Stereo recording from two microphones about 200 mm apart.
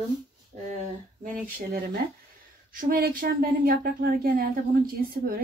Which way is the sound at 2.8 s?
45° right (ahead or behind).